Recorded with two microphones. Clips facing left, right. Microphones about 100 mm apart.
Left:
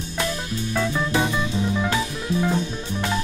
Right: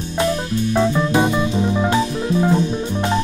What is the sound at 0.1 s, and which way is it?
Music, 25° right (ahead or behind).